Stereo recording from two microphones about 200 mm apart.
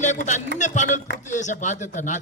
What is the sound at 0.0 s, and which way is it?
A man's voice, 35° left (ahead or behind).